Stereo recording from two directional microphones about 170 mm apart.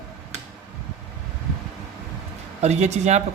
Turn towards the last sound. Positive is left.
turn(degrees=-40)  # may be behind; listen again after turning